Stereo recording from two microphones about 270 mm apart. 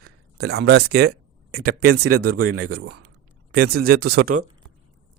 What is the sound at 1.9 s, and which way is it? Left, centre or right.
Speech, right.